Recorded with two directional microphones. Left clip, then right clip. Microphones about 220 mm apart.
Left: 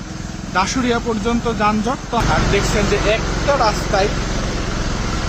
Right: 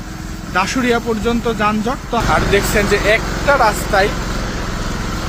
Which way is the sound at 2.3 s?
15° right (ahead or behind).